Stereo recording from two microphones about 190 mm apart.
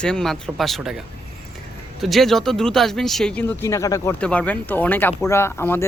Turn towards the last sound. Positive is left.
turn(degrees=10)  # may be behind; listen again after turning